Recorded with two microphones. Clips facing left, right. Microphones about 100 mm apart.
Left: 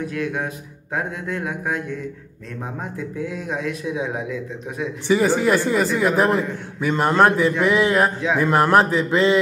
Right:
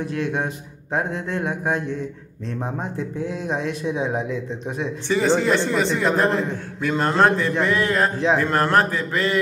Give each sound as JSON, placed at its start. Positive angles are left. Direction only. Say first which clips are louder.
{"t": 0.1, "sound": "speech", "louder": "right 1 dB", "side_deg": -30}
{"t": 3.2, "sound": "speech", "louder": "right 1 dB", "side_deg": -30}
{"t": 5.0, "sound": "speech", "louder": "left 2 dB", "side_deg": 10}